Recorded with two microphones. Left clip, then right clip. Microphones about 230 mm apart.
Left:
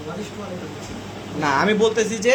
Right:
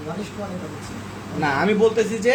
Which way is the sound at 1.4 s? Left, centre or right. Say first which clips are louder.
Even; centre.